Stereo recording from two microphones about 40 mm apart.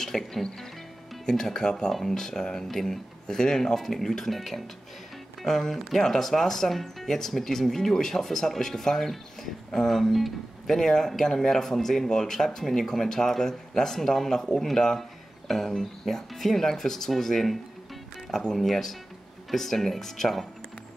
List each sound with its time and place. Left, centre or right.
0.0 s speech: centre
10.8 s speech: centre
18.6 s speech: centre